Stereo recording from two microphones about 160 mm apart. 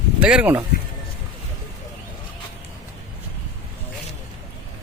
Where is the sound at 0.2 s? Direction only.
5° right (ahead or behind).